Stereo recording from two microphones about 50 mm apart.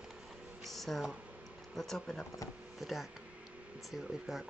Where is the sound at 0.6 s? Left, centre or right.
Centre.